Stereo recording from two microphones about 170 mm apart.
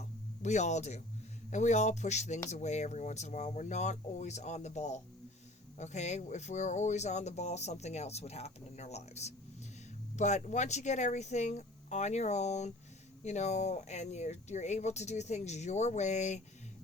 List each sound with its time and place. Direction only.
0.4 s speech: 45° left (ahead or behind)